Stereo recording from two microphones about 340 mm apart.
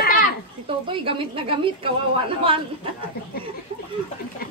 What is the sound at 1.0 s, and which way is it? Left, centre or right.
A woman's voice, centre.